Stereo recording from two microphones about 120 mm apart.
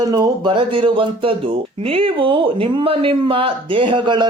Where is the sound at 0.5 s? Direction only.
45° right (ahead or behind).